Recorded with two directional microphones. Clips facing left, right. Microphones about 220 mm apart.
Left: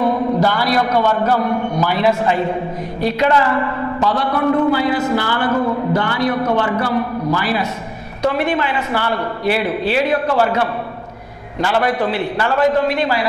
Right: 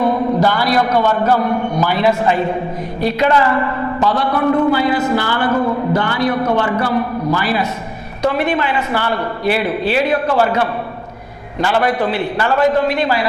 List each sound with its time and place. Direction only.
0.4 s a man's voice: 15° right (ahead or behind)
5.6 s a man's voice: 30° right (ahead or behind)
5.9 s a man's voice: 15° right (ahead or behind)